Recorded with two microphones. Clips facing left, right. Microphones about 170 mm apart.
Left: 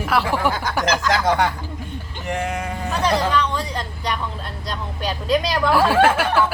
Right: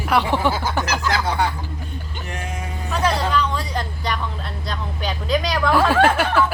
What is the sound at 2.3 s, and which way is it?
Speech, 80° left.